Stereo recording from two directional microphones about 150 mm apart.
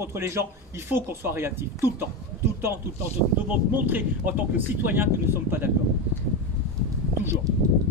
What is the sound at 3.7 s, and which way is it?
Speech, 15° right (ahead or behind).